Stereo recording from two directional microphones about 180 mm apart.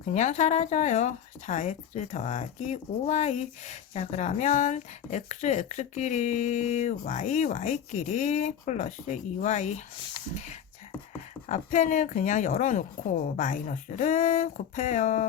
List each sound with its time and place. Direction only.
0.0 s a woman's voice: 40° left (ahead or behind)